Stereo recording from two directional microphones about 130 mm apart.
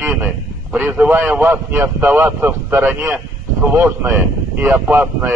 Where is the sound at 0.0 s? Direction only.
15° right (ahead or behind).